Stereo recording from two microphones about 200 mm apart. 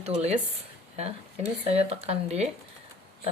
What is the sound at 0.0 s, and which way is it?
Speech, 30° right (ahead or behind).